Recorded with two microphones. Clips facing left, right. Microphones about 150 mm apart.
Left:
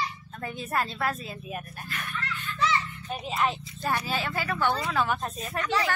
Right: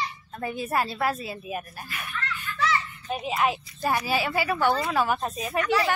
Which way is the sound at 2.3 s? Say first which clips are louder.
Even; 10° right (ahead or behind).